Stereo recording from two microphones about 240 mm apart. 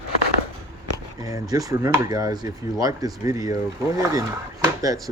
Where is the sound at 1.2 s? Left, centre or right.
Centre.